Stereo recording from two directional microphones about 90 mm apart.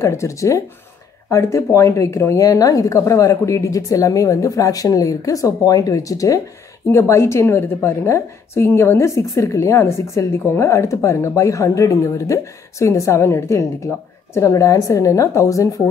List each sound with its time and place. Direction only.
0.0 s a woman's voice: 35° left (ahead or behind)